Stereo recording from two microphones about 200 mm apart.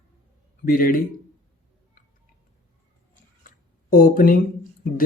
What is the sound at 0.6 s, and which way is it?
Speech, 45° left (ahead or behind).